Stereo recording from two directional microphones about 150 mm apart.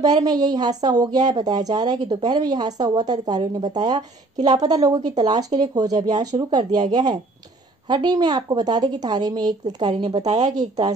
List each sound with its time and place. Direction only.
0.0 s a woman's voice: 25° right (ahead or behind)